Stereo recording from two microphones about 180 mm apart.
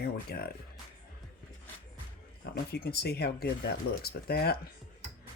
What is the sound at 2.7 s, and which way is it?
Speech, 60° left (ahead or behind).